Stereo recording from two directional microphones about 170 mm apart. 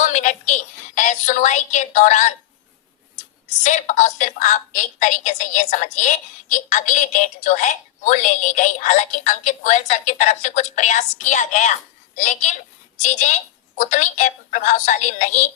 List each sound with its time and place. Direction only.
0.0 s a woman's voice: 45° left (ahead or behind)
3.6 s a woman's voice: 45° left (ahead or behind)